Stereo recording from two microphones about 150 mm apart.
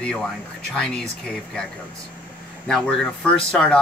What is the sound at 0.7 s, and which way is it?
Speech, 5° left (ahead or behind).